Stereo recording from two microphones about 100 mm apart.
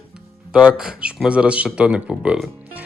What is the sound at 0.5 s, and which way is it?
Speech, 5° right (ahead or behind).